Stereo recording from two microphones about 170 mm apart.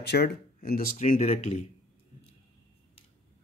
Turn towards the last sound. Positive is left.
turn(degrees=45)  # may be behind; listen again after turning